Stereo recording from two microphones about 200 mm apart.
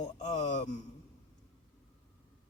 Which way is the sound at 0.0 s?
35° left (ahead or behind).